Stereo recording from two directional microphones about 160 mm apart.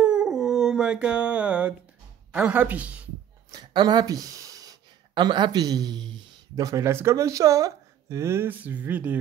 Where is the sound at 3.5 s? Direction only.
25° right (ahead or behind).